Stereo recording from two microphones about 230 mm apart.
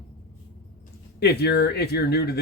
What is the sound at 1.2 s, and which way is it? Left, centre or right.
Speech, left.